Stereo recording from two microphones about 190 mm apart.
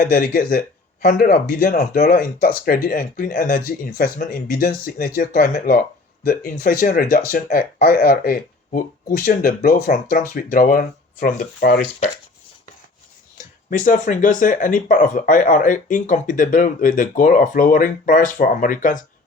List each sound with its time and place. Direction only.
0.0 s speech: 50° left (ahead or behind)
13.7 s speech: 45° left (ahead or behind)